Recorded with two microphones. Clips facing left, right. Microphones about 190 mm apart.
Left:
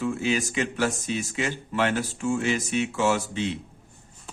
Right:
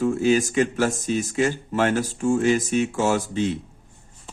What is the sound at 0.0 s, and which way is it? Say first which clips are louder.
Speech: right 6 dB; 45° right (ahead or behind).